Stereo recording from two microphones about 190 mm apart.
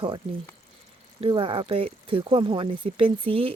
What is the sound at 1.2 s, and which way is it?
Speech, 30° right (ahead or behind).